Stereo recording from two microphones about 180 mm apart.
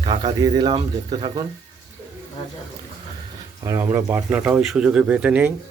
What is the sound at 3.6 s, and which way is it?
Speech, 15° right (ahead or behind).